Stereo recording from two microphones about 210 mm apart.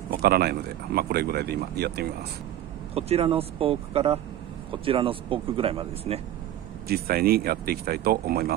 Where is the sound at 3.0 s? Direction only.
30° right (ahead or behind).